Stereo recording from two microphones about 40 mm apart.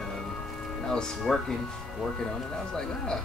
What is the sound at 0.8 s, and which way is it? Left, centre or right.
Speech, centre.